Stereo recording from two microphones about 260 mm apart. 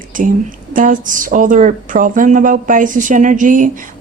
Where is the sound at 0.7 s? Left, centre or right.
Right.